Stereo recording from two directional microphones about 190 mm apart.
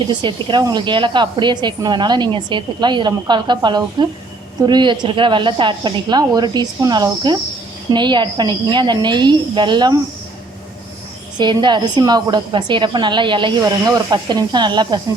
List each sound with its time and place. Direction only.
0.1 s speech: 25° right (ahead or behind)
11.3 s speech: 25° right (ahead or behind)